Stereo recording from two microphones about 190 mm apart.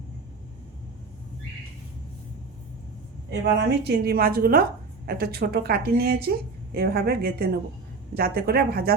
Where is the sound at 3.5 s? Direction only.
60° right (ahead or behind).